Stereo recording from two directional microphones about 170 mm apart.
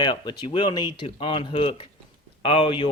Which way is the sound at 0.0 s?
25° left (ahead or behind).